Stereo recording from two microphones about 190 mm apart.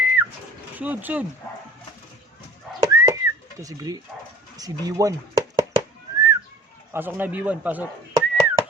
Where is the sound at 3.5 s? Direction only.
20° right (ahead or behind).